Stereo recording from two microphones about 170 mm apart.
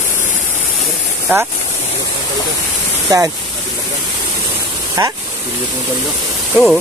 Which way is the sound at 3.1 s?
20° right (ahead or behind).